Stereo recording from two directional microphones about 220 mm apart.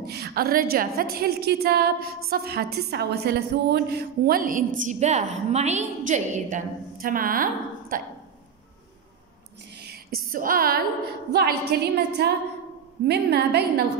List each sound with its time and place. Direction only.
0.0 s a woman's voice: 45° right (ahead or behind)
9.8 s a sound: 40° right (ahead or behind)
11.3 s a woman's voice: 45° right (ahead or behind)